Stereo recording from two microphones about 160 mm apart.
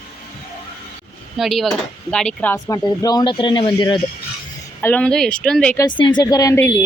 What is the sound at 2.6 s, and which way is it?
Speech, 20° left (ahead or behind).